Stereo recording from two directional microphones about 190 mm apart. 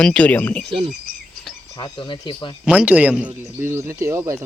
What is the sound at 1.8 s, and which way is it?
Speech, 25° left (ahead or behind).